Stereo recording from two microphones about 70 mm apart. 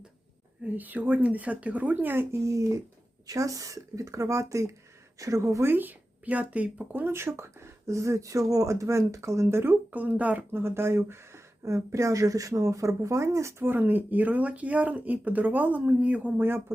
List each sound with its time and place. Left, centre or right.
0.6 s speech: right
2.4 s speech: right
5.6 s speech: right
9.9 s speech: right
10.5 s speech: right
13.7 s speech: right
16.4 s speech: right